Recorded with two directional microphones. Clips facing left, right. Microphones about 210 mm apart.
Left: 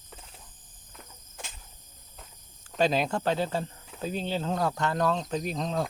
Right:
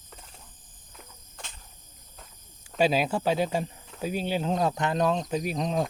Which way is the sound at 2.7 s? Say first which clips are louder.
Right 2 dB; 5° right (ahead or behind).